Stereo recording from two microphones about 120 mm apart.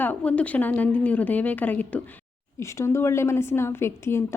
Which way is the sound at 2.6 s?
25° left (ahead or behind).